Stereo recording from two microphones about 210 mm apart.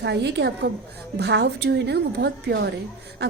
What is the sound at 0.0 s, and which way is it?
A woman's voice, 55° right (ahead or behind).